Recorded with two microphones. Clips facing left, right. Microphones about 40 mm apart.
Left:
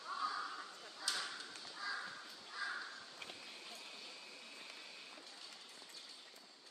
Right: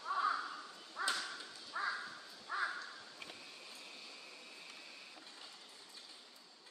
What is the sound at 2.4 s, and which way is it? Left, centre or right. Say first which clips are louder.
Crow: right 7 dB; right.